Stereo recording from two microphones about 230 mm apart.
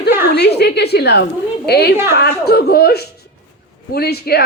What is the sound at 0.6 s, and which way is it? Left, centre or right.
A woman's voice, left.